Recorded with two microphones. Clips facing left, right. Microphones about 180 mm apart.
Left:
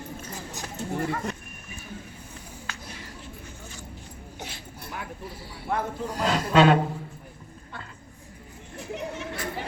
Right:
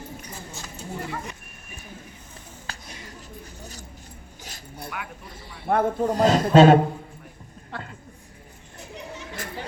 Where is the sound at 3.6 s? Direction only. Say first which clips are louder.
Right 1 dB; 40° right (ahead or behind).